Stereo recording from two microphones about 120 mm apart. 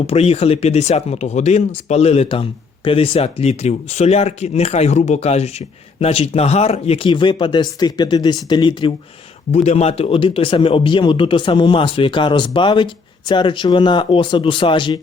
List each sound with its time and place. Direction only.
0.1 s speech: 60° left (ahead or behind)
7.1 s speech: 40° left (ahead or behind)
9.6 s speech: 60° left (ahead or behind); by 15.0 s 45° left (ahead or behind)